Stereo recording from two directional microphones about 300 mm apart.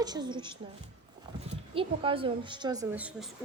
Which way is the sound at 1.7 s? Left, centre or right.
Centre.